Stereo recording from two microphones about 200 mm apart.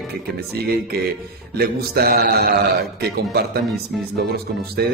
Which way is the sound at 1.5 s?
50° right (ahead or behind).